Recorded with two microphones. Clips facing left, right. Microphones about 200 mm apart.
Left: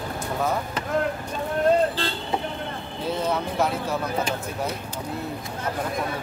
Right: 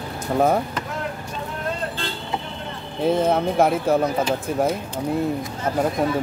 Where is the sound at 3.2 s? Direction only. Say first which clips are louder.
Right 3 dB; 50° right (ahead or behind).